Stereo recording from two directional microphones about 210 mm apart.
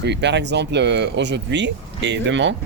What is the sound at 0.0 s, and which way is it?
Speech, 55° right (ahead or behind).